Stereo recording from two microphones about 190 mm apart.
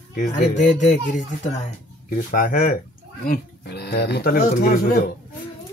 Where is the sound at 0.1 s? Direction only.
40° left (ahead or behind).